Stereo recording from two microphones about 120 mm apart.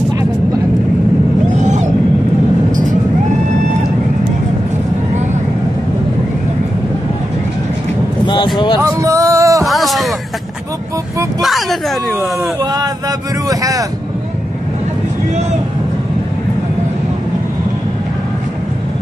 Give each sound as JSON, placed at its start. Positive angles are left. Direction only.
{"t": 1.6, "sound": "whale vocalization", "side_deg": -85}
{"t": 8.8, "sound": "music", "side_deg": -25}
{"t": 9.7, "sound": "a sound", "side_deg": 0}
{"t": 13.5, "sound": "a man's voice", "side_deg": -30}